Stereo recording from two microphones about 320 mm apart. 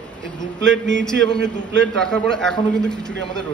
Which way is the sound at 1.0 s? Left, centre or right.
Centre.